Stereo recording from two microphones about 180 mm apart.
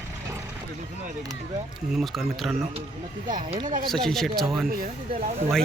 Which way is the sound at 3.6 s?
50° right (ahead or behind).